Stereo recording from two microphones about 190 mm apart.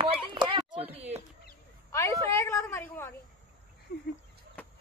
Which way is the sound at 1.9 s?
15° left (ahead or behind).